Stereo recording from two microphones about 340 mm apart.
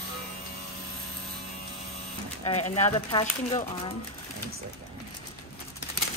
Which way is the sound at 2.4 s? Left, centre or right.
Centre.